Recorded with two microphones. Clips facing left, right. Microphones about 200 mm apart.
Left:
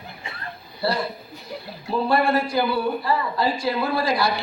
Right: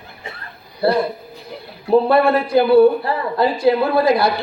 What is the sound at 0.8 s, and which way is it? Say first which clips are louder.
A man's voice: right 8 dB; 55° right (ahead or behind).